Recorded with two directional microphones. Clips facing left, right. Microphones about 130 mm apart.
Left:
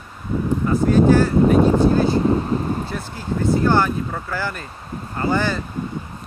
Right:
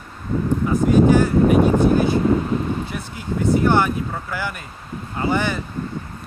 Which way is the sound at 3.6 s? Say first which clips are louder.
Even; 20° right (ahead or behind).